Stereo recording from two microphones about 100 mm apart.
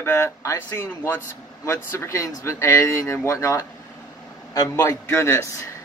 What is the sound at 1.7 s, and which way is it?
Speech, 30° left (ahead or behind).